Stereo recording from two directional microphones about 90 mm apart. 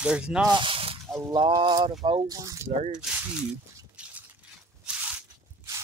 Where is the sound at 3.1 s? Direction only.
15° right (ahead or behind).